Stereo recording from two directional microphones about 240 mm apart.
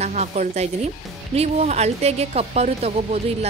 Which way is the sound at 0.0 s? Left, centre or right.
Right.